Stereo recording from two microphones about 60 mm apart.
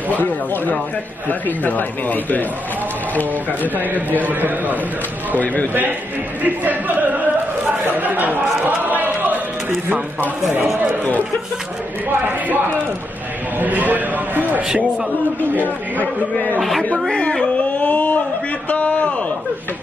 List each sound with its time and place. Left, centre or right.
0.1 s a man's voice: left
4.2 s a man's voice: right
5.4 s a man's voice: left
6.4 s a man's voice: right
7.9 s chatter: right
10.2 s a man's voice: right
12.3 s a man's voice: right
15.5 s a man's voice: left
17.1 s a sound: centre
17.8 s a sound: left